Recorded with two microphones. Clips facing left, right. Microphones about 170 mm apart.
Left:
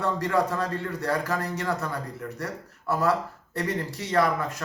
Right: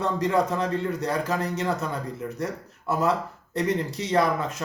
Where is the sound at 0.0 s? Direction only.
20° right (ahead or behind).